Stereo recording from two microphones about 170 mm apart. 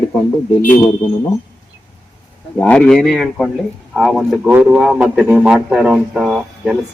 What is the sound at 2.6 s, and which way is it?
A man's voice, 5° left (ahead or behind).